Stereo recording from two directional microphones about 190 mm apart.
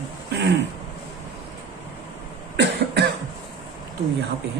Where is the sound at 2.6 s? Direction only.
60° right (ahead or behind).